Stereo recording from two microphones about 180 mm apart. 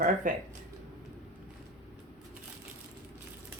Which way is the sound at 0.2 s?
50° right (ahead or behind).